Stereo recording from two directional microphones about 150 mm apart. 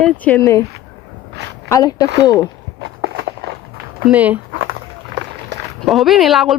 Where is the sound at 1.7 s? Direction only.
25° left (ahead or behind).